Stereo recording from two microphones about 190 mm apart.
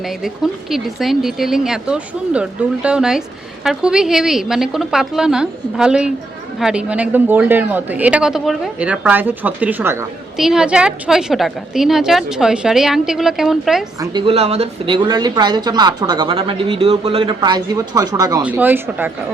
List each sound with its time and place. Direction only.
0.7 s a woman's voice: centre (ahead or behind)
14.0 s a woman's voice: 25° right (ahead or behind)